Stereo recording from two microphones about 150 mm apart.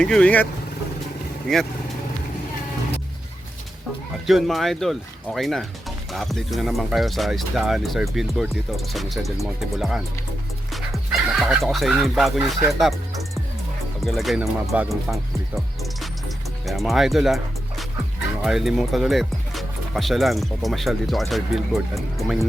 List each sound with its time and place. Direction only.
0.0 s speech: 5° left (ahead or behind)
4.3 s speech: centre (ahead or behind)
10.7 s music: centre (ahead or behind)
14.0 s speech: centre (ahead or behind)